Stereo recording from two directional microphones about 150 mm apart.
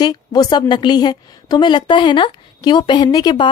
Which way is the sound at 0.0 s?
25° left (ahead or behind).